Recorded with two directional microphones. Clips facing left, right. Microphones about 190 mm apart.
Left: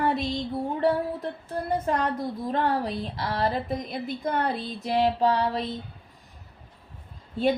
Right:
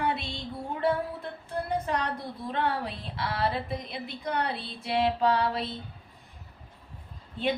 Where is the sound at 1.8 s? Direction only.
45° left (ahead or behind).